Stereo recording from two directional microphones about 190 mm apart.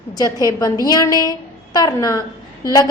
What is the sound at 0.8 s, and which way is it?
A woman's voice, 20° left (ahead or behind).